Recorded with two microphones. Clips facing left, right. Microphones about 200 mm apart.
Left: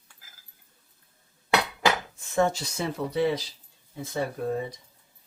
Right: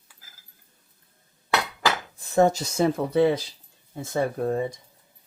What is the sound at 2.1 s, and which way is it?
Speech, 40° right (ahead or behind).